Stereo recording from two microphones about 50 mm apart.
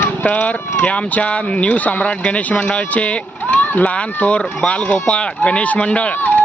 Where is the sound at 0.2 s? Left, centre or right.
Left.